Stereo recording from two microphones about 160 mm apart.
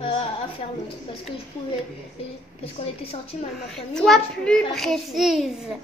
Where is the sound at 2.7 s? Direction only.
40° left (ahead or behind).